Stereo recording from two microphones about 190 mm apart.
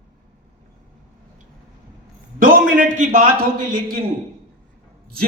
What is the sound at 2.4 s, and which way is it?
A man's voice, 45° right (ahead or behind).